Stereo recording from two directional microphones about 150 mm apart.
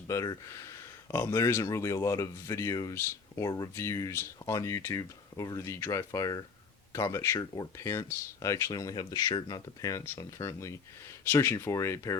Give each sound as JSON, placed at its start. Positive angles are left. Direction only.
{"t": 0.1, "sound": "speech", "side_deg": 20}